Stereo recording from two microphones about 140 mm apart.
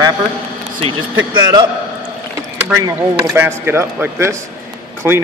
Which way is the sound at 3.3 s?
20° right (ahead or behind).